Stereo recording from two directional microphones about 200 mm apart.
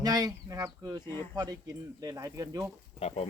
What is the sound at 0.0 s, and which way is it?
Speech, 20° right (ahead or behind).